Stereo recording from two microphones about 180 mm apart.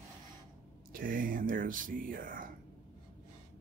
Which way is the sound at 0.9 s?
50° right (ahead or behind).